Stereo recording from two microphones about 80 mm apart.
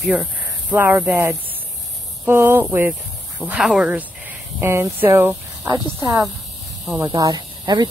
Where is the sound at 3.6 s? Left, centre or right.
Centre.